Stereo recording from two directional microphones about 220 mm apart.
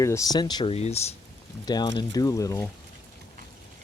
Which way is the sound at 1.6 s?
20° left (ahead or behind).